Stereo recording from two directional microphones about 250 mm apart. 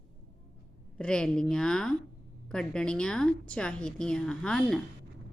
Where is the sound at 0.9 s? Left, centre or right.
Centre.